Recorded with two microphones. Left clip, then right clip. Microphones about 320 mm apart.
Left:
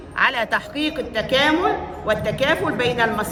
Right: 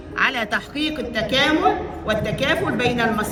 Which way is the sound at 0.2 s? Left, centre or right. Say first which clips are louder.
Left 1 dB; left.